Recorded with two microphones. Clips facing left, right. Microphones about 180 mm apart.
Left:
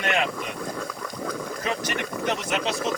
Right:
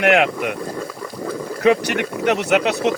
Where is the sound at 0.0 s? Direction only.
75° right (ahead or behind).